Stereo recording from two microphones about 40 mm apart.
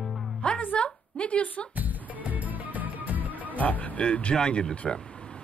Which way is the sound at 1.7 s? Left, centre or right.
Right.